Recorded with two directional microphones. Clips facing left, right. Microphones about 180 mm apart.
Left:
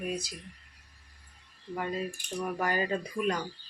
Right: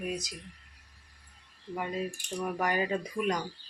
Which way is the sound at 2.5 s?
15° right (ahead or behind).